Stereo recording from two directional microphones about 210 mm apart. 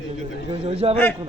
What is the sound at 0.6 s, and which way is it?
Speech, 30° right (ahead or behind).